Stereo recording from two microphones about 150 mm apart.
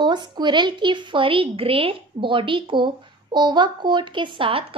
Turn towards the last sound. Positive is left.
turn(degrees=-35)  # may be behind; listen again after turning